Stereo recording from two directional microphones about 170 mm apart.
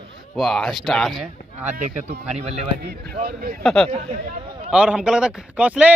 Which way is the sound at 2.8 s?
70° right (ahead or behind).